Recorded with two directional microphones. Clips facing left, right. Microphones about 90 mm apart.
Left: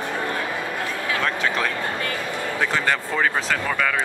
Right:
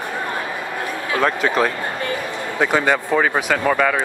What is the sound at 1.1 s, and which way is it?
Speech, 30° right (ahead or behind).